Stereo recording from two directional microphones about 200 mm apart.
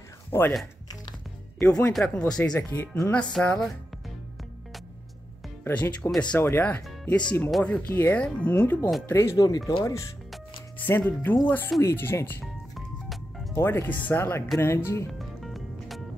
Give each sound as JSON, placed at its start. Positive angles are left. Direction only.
{"t": 0.3, "sound": "speech", "side_deg": 10}
{"t": 1.6, "sound": "speech", "side_deg": 5}
{"t": 5.6, "sound": "speech", "side_deg": 10}
{"t": 12.7, "sound": "music", "side_deg": 0}
{"t": 13.6, "sound": "speech", "side_deg": 10}
{"t": 15.1, "sound": "music", "side_deg": 0}